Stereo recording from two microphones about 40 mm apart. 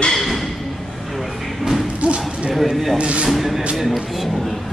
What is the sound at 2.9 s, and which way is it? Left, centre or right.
Speech, right.